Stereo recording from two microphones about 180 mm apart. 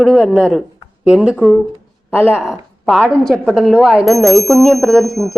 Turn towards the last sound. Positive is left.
turn(degrees=0)  # may be behind; listen again after turning